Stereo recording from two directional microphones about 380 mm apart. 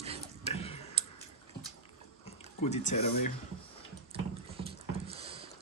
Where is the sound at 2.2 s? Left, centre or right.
Centre.